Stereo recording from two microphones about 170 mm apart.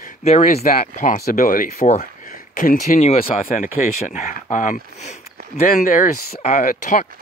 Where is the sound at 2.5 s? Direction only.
55° left (ahead or behind).